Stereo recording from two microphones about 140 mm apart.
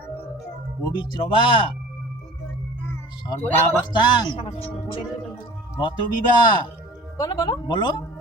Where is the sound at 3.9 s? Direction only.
30° left (ahead or behind).